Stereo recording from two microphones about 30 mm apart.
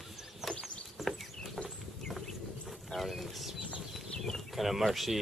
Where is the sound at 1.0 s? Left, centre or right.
Centre.